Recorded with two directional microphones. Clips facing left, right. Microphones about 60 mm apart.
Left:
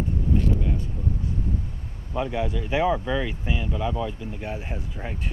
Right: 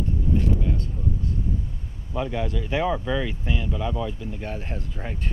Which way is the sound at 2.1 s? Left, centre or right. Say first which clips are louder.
Left 1 dB; centre.